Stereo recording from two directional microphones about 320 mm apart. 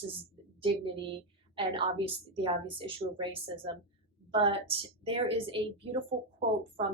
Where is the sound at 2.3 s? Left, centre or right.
Centre.